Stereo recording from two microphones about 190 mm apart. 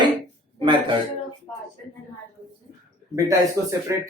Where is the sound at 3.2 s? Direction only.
15° right (ahead or behind).